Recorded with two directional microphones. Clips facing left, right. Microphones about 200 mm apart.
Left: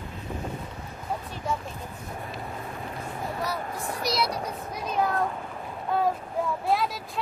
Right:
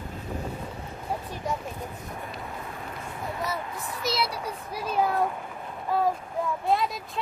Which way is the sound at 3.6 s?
45° left (ahead or behind).